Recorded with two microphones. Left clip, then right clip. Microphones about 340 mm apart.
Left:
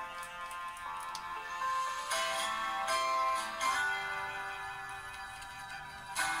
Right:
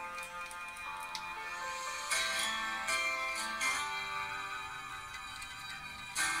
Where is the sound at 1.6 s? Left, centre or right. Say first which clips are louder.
Left 8 dB; left.